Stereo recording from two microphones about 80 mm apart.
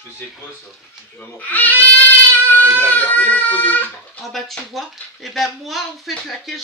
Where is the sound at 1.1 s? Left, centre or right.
Left.